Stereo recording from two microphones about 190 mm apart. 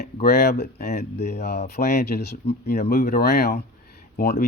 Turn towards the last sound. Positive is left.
turn(degrees=60)  # may be behind; listen again after turning